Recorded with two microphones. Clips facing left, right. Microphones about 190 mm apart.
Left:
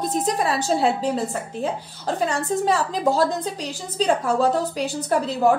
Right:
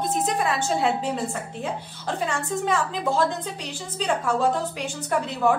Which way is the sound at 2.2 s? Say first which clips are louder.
Left 4 dB; 35° left (ahead or behind).